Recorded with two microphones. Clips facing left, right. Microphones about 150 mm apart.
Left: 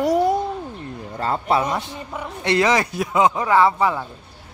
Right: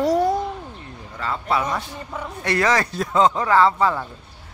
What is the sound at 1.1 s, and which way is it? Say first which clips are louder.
A man's voice: left 3 dB; 35° left (ahead or behind).